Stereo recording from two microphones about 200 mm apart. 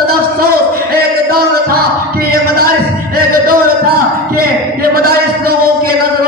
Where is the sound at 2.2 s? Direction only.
50° right (ahead or behind).